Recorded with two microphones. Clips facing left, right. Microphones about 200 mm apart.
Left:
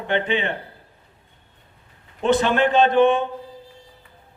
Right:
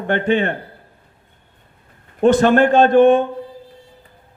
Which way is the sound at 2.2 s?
45° right (ahead or behind).